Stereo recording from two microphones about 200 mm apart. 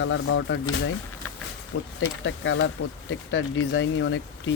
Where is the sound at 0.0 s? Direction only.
75° left (ahead or behind).